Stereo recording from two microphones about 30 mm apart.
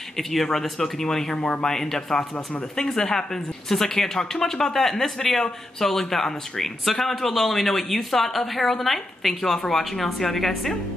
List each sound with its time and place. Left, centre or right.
0.3 s speech: centre
1.3 s speech: left; by 10.8 s centre